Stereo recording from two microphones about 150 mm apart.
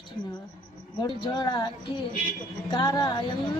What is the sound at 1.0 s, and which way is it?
Speech, 30° left (ahead or behind).